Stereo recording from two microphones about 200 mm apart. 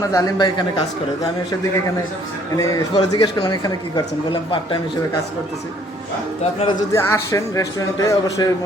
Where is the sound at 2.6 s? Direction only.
15° left (ahead or behind).